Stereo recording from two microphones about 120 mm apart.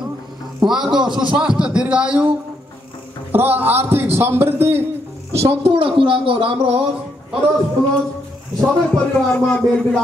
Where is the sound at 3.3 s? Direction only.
15° right (ahead or behind).